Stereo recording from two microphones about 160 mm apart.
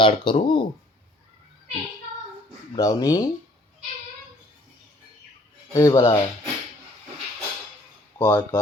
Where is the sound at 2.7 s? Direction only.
20° left (ahead or behind).